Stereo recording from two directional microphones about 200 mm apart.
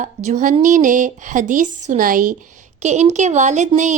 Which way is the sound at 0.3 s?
35° right (ahead or behind).